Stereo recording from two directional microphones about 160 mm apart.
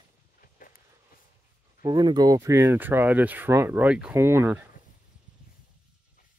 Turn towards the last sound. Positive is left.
turn(degrees=-15)  # may be behind; listen again after turning